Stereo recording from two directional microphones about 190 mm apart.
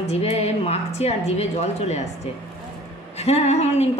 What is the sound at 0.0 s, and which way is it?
Speech, 35° left (ahead or behind).